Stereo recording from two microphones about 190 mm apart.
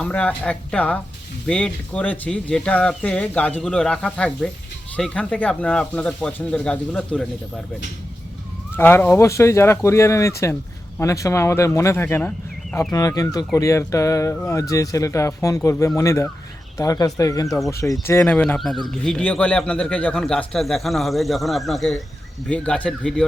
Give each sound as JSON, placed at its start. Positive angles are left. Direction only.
{"t": 0.0, "sound": "speech", "side_deg": 5}
{"t": 8.7, "sound": "speech", "side_deg": 10}